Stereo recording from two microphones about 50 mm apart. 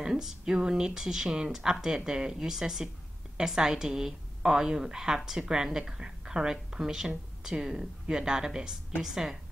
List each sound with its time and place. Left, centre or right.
0.0 s a woman's voice: centre